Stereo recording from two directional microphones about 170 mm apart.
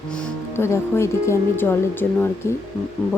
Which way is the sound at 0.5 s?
15° left (ahead or behind).